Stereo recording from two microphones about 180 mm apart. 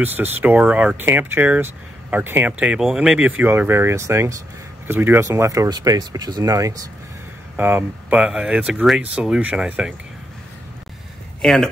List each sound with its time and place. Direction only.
0.0 s speech: 10° right (ahead or behind)
11.4 s speech: centre (ahead or behind)